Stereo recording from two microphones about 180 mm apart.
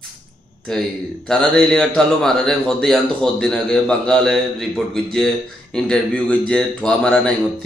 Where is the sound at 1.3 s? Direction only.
5° left (ahead or behind).